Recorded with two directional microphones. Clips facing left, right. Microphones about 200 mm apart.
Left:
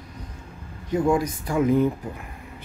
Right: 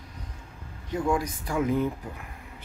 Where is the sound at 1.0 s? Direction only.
25° left (ahead or behind).